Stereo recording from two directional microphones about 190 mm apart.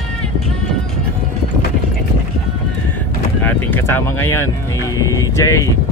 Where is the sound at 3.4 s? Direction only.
10° left (ahead or behind).